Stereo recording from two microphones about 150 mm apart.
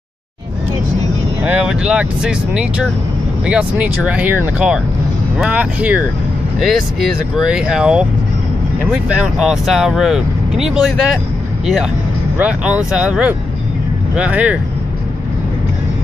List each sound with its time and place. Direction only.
1.4 s speech: 5° right (ahead or behind)